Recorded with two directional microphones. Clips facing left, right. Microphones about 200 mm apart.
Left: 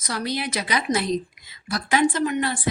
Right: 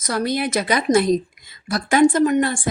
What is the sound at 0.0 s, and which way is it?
A woman's voice, 50° right (ahead or behind).